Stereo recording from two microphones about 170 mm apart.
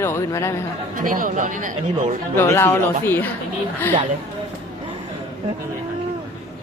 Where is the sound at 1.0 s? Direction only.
55° right (ahead or behind).